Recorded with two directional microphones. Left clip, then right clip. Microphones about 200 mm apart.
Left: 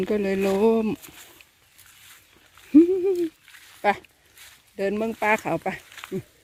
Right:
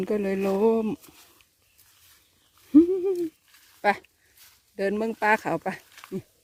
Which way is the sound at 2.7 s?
5° right (ahead or behind).